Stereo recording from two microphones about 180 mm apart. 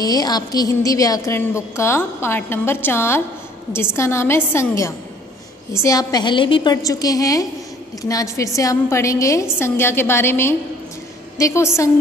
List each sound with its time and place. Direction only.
0.0 s a woman's voice: 20° left (ahead or behind)